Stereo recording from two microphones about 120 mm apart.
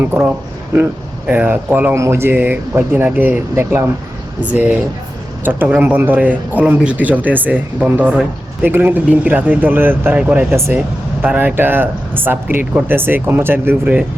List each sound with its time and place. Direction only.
0.0 s speech: 20° right (ahead or behind)
1.3 s speech: 15° right (ahead or behind)